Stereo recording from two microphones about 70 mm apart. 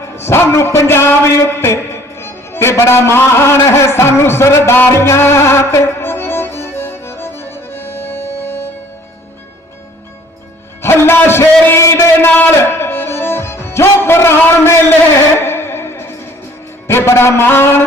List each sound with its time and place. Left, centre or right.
0.2 s a man's voice: left
4.9 s music: left
10.8 s music: left
11.7 s a sound: left
12.5 s music: left
16.8 s a man's voice: left